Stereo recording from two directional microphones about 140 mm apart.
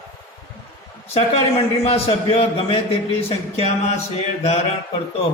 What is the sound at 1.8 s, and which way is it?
Speech, 45° left (ahead or behind).